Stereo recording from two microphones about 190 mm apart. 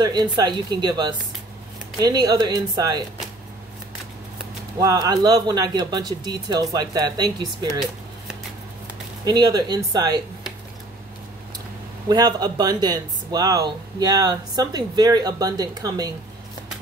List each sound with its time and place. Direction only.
0.0 s speech: 20° right (ahead or behind)
4.7 s speech: 20° right (ahead or behind)
9.2 s speech: 20° right (ahead or behind)
12.1 s speech: 20° right (ahead or behind)